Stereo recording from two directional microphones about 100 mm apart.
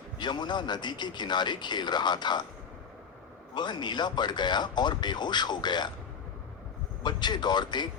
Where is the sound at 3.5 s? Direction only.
50° left (ahead or behind).